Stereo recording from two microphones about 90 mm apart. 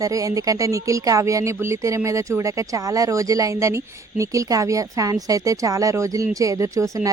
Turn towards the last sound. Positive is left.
turn(degrees=-40)  # may be behind; listen again after turning